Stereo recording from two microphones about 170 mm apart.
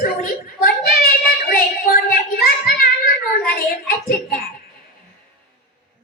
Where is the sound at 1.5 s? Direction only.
60° left (ahead or behind).